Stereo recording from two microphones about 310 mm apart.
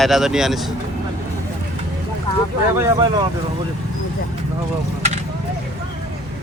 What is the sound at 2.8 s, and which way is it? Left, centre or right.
Speech, centre.